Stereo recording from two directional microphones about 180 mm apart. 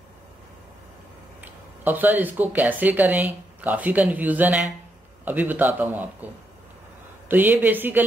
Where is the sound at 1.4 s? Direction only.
10° right (ahead or behind).